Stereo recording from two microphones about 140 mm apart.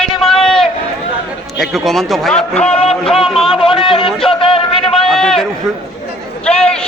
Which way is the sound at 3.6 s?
40° left (ahead or behind).